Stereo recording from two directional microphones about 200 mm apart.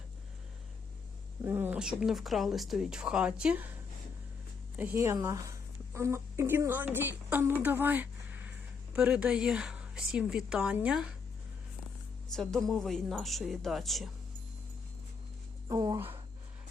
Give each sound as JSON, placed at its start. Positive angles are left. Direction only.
{"t": 1.5, "sound": "speech", "side_deg": -10}
{"t": 4.8, "sound": "speech", "side_deg": -10}
{"t": 12.3, "sound": "speech", "side_deg": 0}
{"t": 15.7, "sound": "speech", "side_deg": -20}